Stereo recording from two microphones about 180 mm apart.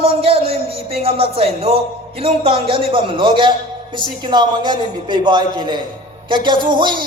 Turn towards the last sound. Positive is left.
turn(degrees=-25)  # may be behind; listen again after turning